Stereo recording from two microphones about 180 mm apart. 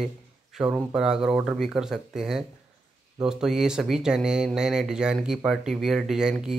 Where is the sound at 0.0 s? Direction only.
Centre (ahead or behind).